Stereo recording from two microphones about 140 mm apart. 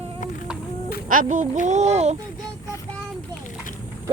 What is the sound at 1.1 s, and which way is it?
Speech, 70° right (ahead or behind).